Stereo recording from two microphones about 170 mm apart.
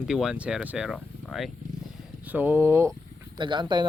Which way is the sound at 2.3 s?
10° right (ahead or behind).